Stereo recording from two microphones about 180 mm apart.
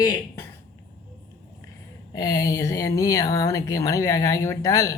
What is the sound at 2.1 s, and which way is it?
Speech, 20° left (ahead or behind).